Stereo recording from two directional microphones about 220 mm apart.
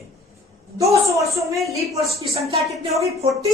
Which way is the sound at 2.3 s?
25° right (ahead or behind).